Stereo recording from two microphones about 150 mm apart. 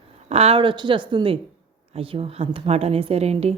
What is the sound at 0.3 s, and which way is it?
A woman's voice, 45° right (ahead or behind).